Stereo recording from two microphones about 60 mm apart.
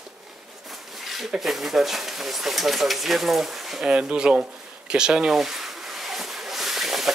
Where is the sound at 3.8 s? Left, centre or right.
Centre.